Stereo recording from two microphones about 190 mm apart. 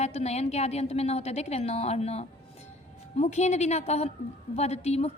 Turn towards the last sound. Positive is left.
turn(degrees=35)  # may be behind; listen again after turning